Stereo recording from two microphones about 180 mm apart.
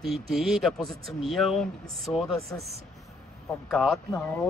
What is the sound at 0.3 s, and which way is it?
Speech, centre (ahead or behind).